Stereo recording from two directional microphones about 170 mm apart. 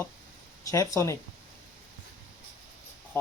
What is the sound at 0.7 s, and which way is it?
Speech, 15° left (ahead or behind).